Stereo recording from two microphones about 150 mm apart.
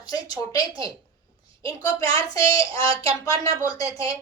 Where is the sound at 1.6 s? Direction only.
25° left (ahead or behind).